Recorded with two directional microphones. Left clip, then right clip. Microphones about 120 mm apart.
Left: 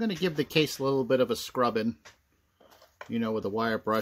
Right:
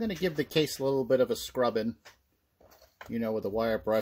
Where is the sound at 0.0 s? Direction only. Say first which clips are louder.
Left 1 dB; 25° left (ahead or behind).